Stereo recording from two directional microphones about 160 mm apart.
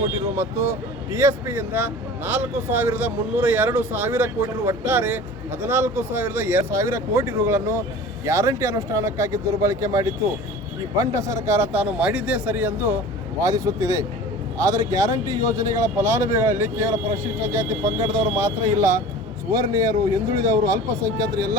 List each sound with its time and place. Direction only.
0.3 s speech: 15° right (ahead or behind)